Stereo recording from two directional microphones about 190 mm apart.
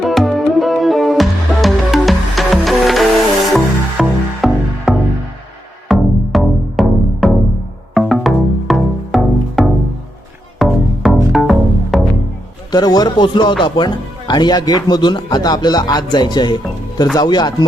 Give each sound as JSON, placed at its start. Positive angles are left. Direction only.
{"t": 0.0, "sound": "music", "side_deg": 0}
{"t": 12.7, "sound": "speech", "side_deg": 20}